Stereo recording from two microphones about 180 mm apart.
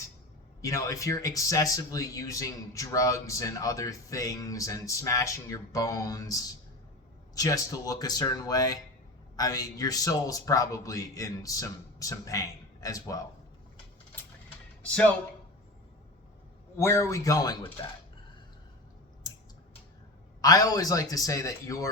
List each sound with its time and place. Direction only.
0.6 s speech: 15° left (ahead or behind)
14.8 s speech: 5° left (ahead or behind)
16.7 s speech: 15° left (ahead or behind)
19.3 s a sound: 20° left (ahead or behind)
20.4 s speech: 20° left (ahead or behind)